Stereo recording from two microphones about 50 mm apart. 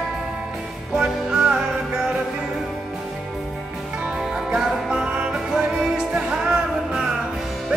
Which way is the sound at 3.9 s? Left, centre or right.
Centre.